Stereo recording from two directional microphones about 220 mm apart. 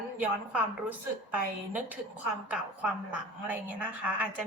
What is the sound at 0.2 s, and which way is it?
A woman's voice, 5° right (ahead or behind).